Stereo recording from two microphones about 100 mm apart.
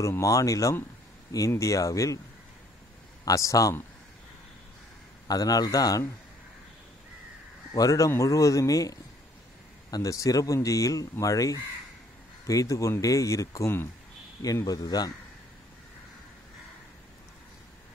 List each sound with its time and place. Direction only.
0.0 s speech: 35° left (ahead or behind)
3.3 s speech: 35° left (ahead or behind)
5.3 s speech: 40° left (ahead or behind)
7.7 s speech: 35° left (ahead or behind)